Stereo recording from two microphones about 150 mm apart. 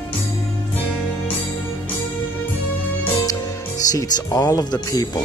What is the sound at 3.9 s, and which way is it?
Speech, 25° left (ahead or behind).